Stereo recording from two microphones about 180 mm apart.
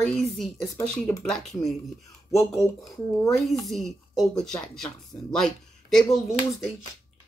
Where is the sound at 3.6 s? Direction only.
Centre (ahead or behind).